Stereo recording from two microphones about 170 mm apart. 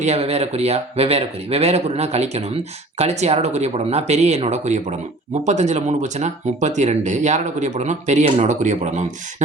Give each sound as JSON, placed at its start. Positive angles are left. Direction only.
{"t": 0.0, "sound": "speech", "side_deg": -40}